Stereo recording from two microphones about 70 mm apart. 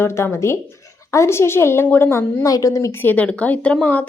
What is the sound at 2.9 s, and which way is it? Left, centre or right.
Speech, left.